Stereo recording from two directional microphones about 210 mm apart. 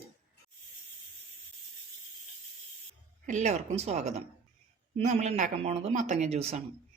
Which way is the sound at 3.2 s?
35° right (ahead or behind).